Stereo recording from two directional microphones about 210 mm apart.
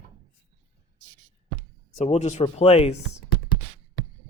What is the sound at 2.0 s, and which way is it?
Speech, 35° left (ahead or behind).